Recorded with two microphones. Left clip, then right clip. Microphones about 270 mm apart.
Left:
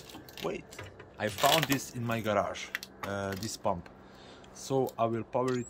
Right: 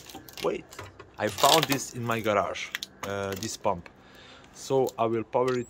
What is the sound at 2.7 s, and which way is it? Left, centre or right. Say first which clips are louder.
Typing: right 3 dB; right.